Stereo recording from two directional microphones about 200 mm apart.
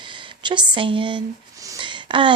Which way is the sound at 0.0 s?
25° right (ahead or behind).